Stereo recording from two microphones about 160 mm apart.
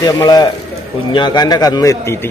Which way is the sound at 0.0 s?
25° left (ahead or behind).